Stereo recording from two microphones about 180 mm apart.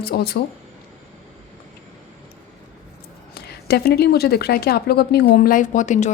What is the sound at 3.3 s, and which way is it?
A woman's voice, 60° left (ahead or behind).